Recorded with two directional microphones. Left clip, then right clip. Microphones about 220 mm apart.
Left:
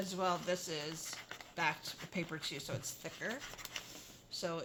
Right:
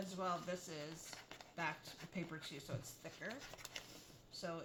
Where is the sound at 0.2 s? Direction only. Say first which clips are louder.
Left 7 dB; 45° left (ahead or behind).